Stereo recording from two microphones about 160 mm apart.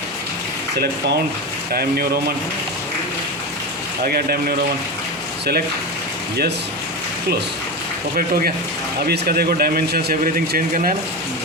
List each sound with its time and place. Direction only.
1.7 s speech: 70° right (ahead or behind)
4.0 s speech: 70° right (ahead or behind)
8.1 s speech: 65° right (ahead or behind)
9.0 s speech: 80° right; by 10.9 s 60° right (ahead or behind)